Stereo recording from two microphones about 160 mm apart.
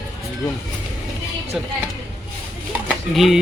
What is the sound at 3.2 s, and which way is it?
Speech, centre (ahead or behind).